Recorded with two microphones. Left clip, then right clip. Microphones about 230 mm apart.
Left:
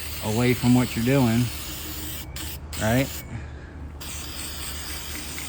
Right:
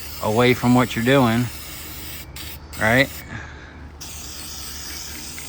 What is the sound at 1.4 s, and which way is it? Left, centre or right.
Spray, centre.